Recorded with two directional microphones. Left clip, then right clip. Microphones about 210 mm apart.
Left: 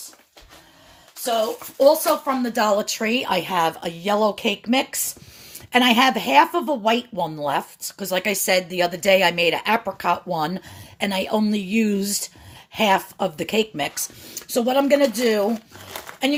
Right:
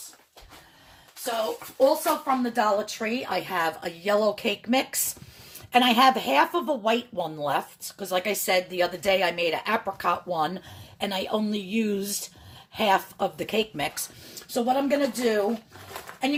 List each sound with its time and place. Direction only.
1.8 s speech: 50° left (ahead or behind); by 14.0 s 20° left (ahead or behind)
14.3 s speech: 40° left (ahead or behind)